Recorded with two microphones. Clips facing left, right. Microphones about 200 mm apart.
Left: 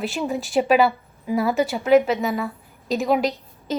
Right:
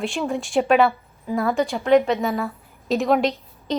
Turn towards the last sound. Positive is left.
turn(degrees=0)  # may be behind; listen again after turning